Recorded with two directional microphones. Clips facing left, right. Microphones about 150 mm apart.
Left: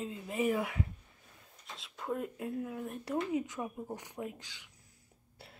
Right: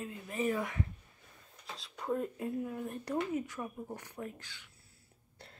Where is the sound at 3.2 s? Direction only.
20° left (ahead or behind).